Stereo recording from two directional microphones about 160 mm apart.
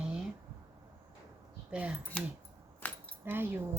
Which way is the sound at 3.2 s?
15° right (ahead or behind).